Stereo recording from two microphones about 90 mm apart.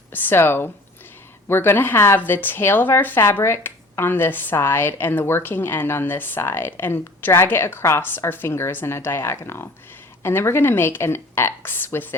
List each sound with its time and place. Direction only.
0.1 s speech: 20° left (ahead or behind)